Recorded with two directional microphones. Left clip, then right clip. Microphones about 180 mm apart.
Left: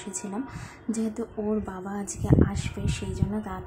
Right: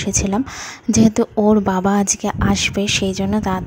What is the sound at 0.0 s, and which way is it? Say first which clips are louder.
A woman's voice: right 15 dB; 45° right (ahead or behind).